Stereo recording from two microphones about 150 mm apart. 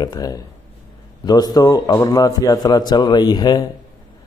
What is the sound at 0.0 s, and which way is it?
A man's voice, 25° left (ahead or behind).